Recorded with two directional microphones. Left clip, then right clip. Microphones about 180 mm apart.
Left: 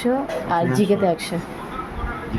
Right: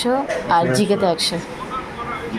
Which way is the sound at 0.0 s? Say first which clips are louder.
Right 3 dB; 20° left (ahead or behind).